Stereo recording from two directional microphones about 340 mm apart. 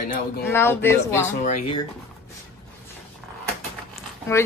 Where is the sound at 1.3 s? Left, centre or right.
Left.